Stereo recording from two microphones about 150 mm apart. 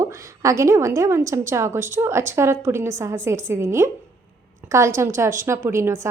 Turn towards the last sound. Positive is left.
turn(degrees=-20)  # may be behind; listen again after turning